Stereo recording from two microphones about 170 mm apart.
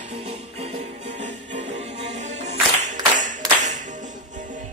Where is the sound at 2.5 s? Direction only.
45° right (ahead or behind).